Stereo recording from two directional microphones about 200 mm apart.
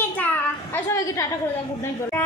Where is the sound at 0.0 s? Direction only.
10° left (ahead or behind).